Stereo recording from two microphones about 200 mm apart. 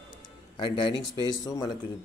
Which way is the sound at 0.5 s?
25° left (ahead or behind).